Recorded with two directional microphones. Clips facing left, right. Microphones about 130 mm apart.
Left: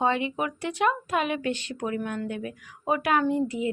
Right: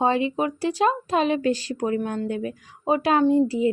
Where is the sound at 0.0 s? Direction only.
30° right (ahead or behind).